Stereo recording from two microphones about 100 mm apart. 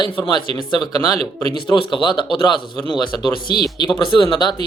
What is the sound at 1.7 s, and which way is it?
Speech, 55° left (ahead or behind).